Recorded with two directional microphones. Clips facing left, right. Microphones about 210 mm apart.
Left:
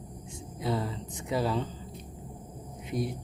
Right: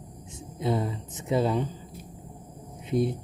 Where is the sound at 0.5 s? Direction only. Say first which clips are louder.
Right 4 dB; 20° right (ahead or behind).